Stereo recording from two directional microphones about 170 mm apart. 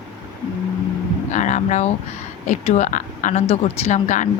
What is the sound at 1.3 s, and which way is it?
A woman's voice, 45° left (ahead or behind).